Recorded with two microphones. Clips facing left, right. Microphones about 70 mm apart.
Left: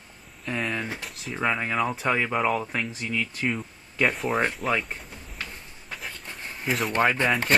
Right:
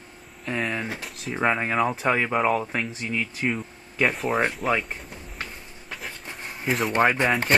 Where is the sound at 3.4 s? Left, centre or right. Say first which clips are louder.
Right 1 dB; centre.